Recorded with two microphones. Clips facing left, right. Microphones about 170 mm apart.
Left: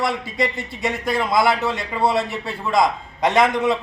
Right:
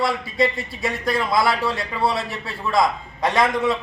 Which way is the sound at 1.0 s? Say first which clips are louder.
Left 1 dB; 20° left (ahead or behind).